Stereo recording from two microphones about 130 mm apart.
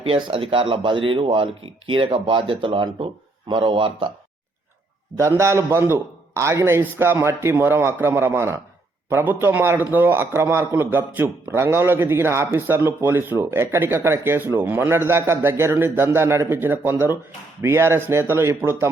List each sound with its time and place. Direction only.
0.0 s speech: 45° right (ahead or behind)
5.1 s a man's voice: 20° right (ahead or behind)